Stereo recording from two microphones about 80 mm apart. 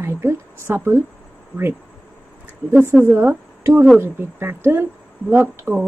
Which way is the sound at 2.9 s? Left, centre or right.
Right.